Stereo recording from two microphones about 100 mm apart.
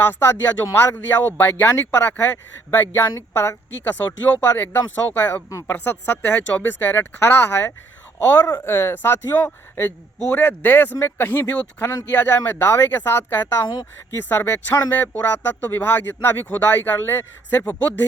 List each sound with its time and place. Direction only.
0.0 s a man's voice: 20° left (ahead or behind)
5.5 s speech: 35° left (ahead or behind)
5.7 s a man's voice: 15° left (ahead or behind)
11.8 s speech: 35° left (ahead or behind)
12.1 s speech: 20° left (ahead or behind)